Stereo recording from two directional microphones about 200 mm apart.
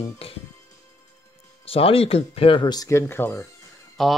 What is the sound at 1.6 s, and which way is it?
Speech, 30° left (ahead or behind).